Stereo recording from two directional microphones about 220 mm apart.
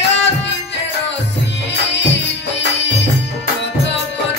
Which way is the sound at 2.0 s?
55° left (ahead or behind).